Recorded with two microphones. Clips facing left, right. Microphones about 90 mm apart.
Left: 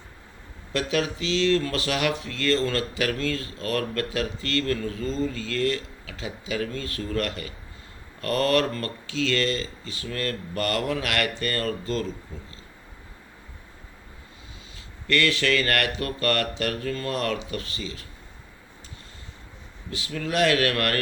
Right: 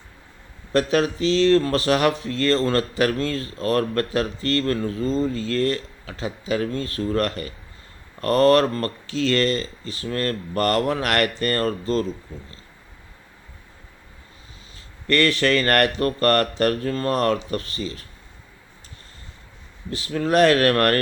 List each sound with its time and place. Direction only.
0.7 s speech: 40° right (ahead or behind)
15.0 s speech: 40° right (ahead or behind)
19.9 s speech: 40° right (ahead or behind)